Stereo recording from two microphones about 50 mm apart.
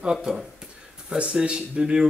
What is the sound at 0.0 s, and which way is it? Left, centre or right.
A man's voice, centre.